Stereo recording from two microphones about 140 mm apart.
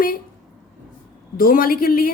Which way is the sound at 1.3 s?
90° left.